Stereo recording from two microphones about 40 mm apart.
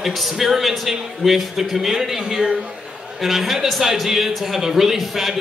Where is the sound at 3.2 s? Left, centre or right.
Centre.